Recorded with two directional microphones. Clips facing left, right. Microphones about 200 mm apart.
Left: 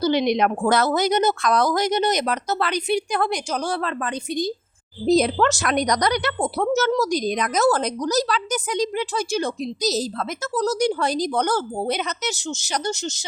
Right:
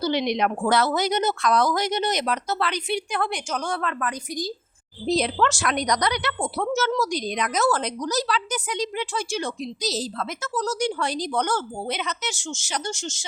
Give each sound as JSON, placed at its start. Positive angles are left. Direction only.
{"t": 0.0, "sound": "a woman's voice", "side_deg": 45}
{"t": 5.0, "sound": "a woman's voice", "side_deg": 45}